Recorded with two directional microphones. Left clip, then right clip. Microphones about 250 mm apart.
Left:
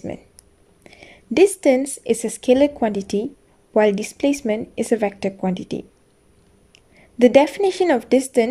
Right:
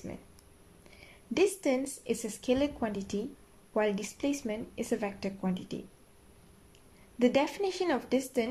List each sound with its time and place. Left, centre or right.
0.8 s a woman's voice: left
7.2 s a woman's voice: left